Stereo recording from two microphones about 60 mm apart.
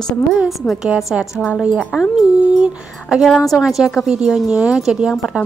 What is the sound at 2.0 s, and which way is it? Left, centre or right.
Speech, centre.